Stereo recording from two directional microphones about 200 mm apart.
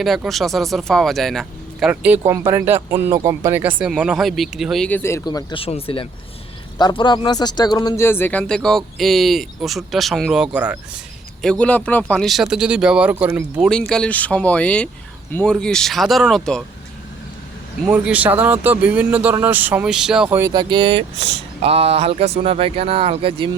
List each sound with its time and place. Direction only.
0.0 s speech: centre (ahead or behind)
11.4 s speech: 5° left (ahead or behind)
13.7 s speech: 5° left (ahead or behind)
17.8 s speech: 5° right (ahead or behind); by 21.0 s 25° right (ahead or behind)
21.2 s speech: 60° right (ahead or behind)
21.6 s speech: 30° right (ahead or behind)